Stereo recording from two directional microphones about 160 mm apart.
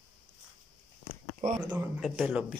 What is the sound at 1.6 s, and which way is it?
Speech, 5° right (ahead or behind).